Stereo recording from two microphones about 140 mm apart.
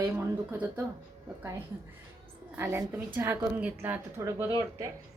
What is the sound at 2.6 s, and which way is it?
Speech, 15° right (ahead or behind).